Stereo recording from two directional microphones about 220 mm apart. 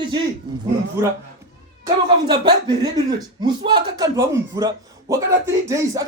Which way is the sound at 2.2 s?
20° right (ahead or behind).